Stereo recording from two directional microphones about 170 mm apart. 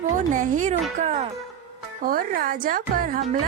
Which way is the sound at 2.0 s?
60° right (ahead or behind).